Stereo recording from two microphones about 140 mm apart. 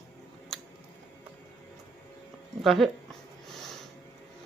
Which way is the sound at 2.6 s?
Centre (ahead or behind).